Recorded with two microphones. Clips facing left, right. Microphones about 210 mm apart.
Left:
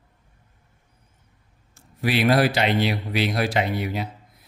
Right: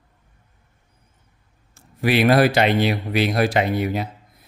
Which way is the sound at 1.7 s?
60° right (ahead or behind).